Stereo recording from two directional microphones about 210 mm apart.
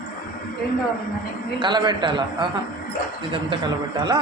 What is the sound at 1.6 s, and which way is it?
Speech, 20° right (ahead or behind).